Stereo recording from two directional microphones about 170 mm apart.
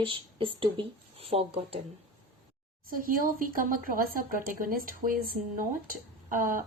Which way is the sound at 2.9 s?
55° right (ahead or behind).